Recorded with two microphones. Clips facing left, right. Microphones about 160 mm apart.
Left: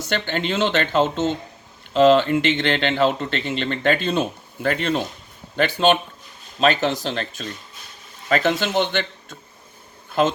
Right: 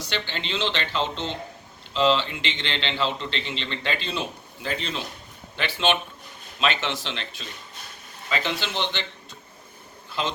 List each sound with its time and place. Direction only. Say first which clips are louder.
0.1 s a man's voice: left 8 dB; 50° left (ahead or behind)
5.5 s a man's voice: left 7 dB; 45° left (ahead or behind)
10.1 s bee: left 9 dB; 50° left (ahead or behind)